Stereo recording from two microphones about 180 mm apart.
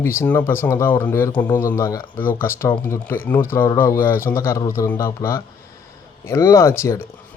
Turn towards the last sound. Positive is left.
turn(degrees=15)  # may be behind; listen again after turning